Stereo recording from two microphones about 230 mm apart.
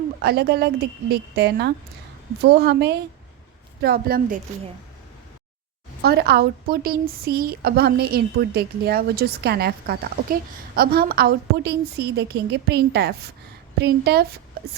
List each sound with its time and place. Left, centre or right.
0.2 s a woman's voice: right
6.0 s a woman's voice: right